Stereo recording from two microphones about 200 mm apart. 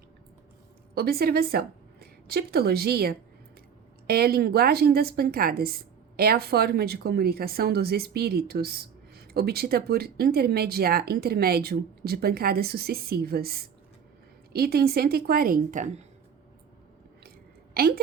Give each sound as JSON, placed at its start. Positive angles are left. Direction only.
{"t": 0.9, "sound": "a woman's voice", "side_deg": -50}
{"t": 17.7, "sound": "speech", "side_deg": -50}